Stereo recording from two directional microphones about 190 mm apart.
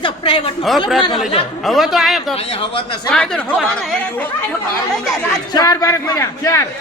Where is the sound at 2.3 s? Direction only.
30° left (ahead or behind).